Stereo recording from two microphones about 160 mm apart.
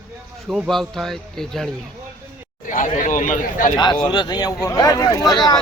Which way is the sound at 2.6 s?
55° left (ahead or behind).